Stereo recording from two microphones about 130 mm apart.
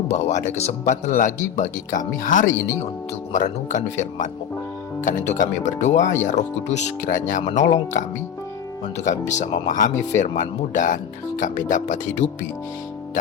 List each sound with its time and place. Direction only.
0.1 s speech: 60° left (ahead or behind); by 2.5 s 85° left
3.3 s speech: 70° left (ahead or behind)
9.3 s speech: 70° left (ahead or behind); by 9.9 s 90° left
10.2 s speech: 70° left (ahead or behind)